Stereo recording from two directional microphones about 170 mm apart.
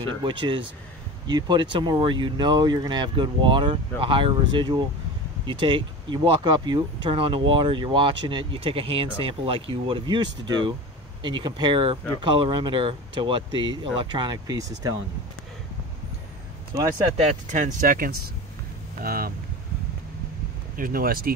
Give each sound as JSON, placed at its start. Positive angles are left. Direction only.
{"t": 0.2, "sound": "speech", "side_deg": -30}
{"t": 17.2, "sound": "speech", "side_deg": -45}
{"t": 20.7, "sound": "speech", "side_deg": -55}